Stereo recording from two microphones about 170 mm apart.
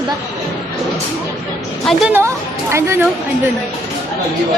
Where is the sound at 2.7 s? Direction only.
15° right (ahead or behind).